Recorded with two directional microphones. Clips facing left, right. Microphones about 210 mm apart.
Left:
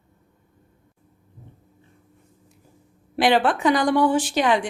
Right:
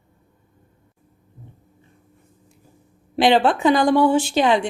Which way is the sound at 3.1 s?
25° right (ahead or behind).